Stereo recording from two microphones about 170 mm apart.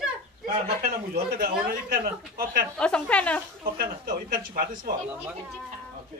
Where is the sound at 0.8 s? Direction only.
60° right (ahead or behind).